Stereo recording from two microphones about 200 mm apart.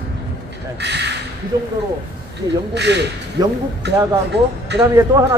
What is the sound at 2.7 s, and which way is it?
Speech, 60° right (ahead or behind).